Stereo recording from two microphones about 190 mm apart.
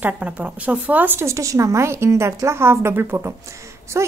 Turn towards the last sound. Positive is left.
turn(degrees=-15)  # may be behind; listen again after turning